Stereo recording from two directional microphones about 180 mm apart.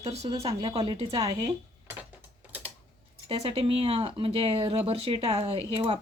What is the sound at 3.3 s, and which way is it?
Speech, 35° right (ahead or behind).